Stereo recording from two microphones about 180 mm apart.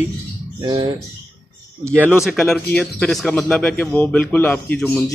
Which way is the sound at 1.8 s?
10° right (ahead or behind).